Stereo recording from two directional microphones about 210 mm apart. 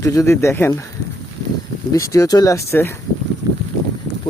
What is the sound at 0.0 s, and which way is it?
Speech, 15° left (ahead or behind).